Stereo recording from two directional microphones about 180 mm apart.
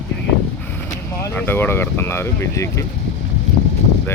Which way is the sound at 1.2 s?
10° left (ahead or behind).